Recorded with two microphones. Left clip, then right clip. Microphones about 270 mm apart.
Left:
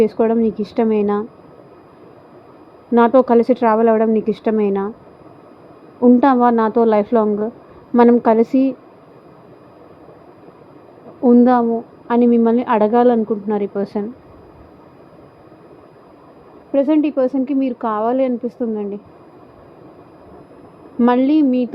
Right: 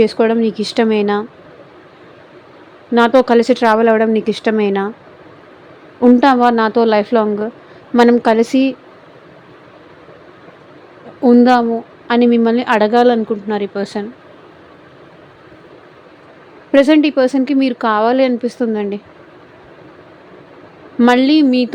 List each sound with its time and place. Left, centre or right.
0.0 s a woman's voice: right
2.9 s a woman's voice: centre
6.0 s a woman's voice: centre
11.2 s a woman's voice: centre
16.7 s a woman's voice: right
21.0 s a woman's voice: right